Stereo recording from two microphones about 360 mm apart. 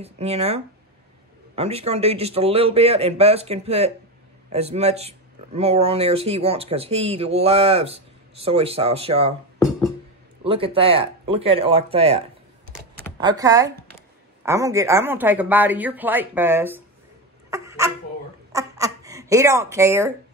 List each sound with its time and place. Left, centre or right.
0.0 s speech: centre
10.4 s speech: centre
17.5 s a sound: centre